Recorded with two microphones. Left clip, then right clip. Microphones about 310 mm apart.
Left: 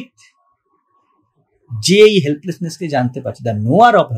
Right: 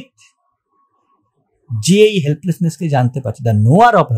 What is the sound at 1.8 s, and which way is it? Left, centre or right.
Speech, right.